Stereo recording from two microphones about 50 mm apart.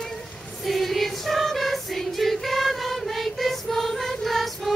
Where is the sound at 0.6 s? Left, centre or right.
Centre.